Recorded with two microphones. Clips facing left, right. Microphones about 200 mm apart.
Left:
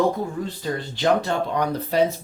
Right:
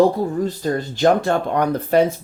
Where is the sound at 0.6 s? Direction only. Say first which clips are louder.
Right 5 dB; 45° right (ahead or behind).